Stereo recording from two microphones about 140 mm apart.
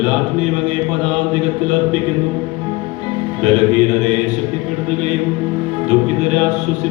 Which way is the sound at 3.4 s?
55° right (ahead or behind).